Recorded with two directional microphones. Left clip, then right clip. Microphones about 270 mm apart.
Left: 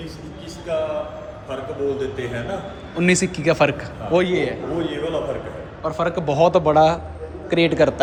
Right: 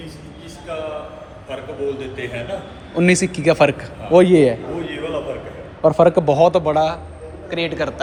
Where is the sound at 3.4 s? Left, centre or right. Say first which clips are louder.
Right 4 dB; centre.